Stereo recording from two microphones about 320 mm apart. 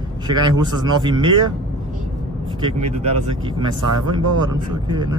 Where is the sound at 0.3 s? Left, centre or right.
Centre.